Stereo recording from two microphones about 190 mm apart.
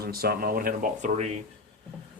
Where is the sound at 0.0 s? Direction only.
55° right (ahead or behind); by 1.4 s 40° right (ahead or behind).